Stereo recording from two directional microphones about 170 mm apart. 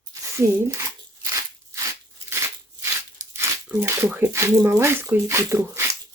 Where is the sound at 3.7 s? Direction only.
10° right (ahead or behind).